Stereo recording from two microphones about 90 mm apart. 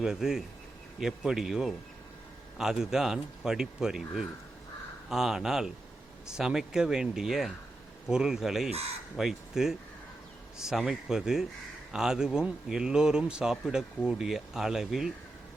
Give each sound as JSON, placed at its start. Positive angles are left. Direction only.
{"t": 0.0, "sound": "speech", "side_deg": -5}